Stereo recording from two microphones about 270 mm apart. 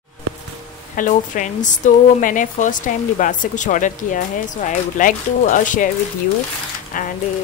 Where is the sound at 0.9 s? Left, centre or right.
Left.